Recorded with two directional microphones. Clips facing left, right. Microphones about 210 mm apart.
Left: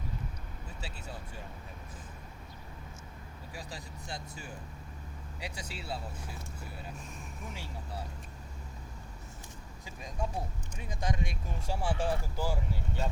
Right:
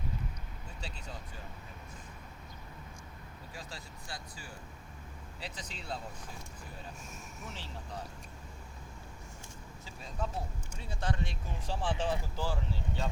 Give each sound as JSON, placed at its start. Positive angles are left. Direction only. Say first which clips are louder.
{"t": 0.8, "sound": "speech", "louder": "even", "side_deg": 5}
{"t": 3.5, "sound": "speech", "louder": "left 3 dB", "side_deg": 15}
{"t": 5.4, "sound": "speech", "louder": "left 3 dB", "side_deg": 10}
{"t": 7.5, "sound": "speech", "louder": "even", "side_deg": 10}
{"t": 9.8, "sound": "speech", "louder": "left 1 dB", "side_deg": 15}